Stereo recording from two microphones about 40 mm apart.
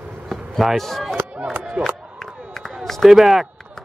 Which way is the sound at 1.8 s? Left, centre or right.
Right.